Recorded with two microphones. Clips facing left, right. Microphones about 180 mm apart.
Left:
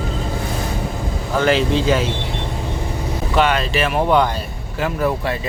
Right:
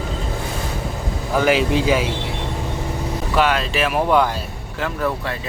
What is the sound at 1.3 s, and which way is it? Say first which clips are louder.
Speech: even; 10° right (ahead or behind).